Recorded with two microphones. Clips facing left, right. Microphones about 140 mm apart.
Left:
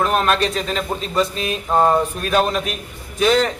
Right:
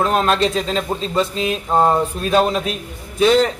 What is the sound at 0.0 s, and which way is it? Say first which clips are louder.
Speech: right 1 dB; 25° right (ahead or behind).